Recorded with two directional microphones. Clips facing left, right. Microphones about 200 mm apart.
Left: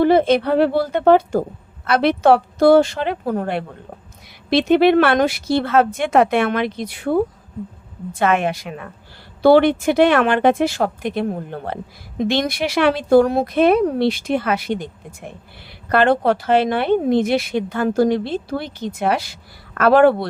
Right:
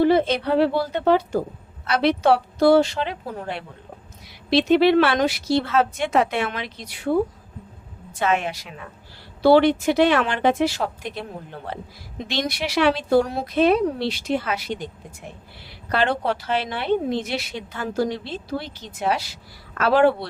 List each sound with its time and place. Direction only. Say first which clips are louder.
0.0 s a woman's voice: left 4 dB; 50° left (ahead or behind)
8.2 s a woman's voice: left 5 dB; 55° left (ahead or behind)